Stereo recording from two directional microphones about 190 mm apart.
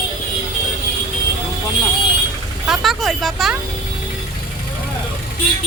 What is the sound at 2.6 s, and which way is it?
Speech, centre (ahead or behind).